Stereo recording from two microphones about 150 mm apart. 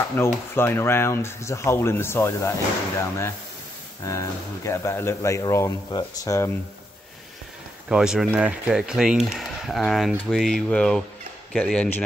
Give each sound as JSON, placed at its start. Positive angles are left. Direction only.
{"t": 0.2, "sound": "speech", "side_deg": 15}
{"t": 7.9, "sound": "speech", "side_deg": -5}